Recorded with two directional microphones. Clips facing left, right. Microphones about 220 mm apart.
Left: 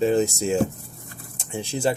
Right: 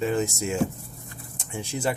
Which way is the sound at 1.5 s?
30° left (ahead or behind).